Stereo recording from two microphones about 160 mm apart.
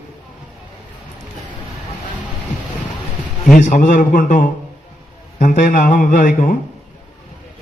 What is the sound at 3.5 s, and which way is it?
A man's voice, 50° left (ahead or behind).